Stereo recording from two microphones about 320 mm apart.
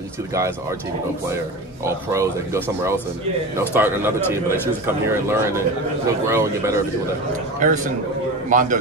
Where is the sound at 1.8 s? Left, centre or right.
Centre.